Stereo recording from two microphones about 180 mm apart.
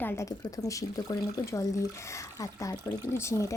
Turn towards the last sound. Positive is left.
turn(degrees=15)  # may be behind; listen again after turning